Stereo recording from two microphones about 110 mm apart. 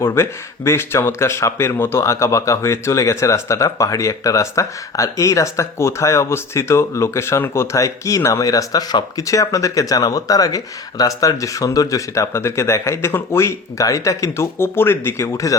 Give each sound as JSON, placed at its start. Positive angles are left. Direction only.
{"t": 0.0, "sound": "speech", "side_deg": 25}